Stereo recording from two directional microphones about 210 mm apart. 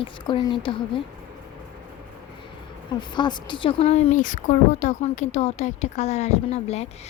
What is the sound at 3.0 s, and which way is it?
A woman's voice, 20° left (ahead or behind).